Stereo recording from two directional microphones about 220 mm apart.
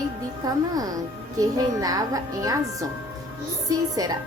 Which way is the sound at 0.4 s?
15° right (ahead or behind).